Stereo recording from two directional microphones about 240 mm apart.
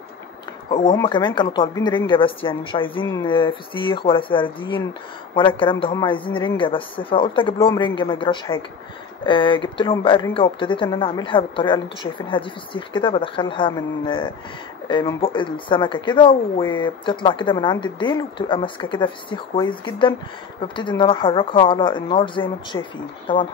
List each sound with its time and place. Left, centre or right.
0.9 s speech: centre